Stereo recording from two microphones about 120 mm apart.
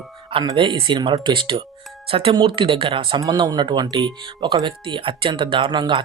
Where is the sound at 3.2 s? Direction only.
35° right (ahead or behind).